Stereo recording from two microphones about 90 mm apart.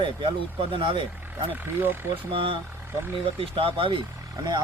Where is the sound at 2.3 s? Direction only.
75° right (ahead or behind).